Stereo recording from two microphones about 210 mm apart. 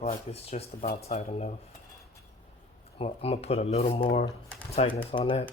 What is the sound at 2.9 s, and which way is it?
Speech, 30° left (ahead or behind).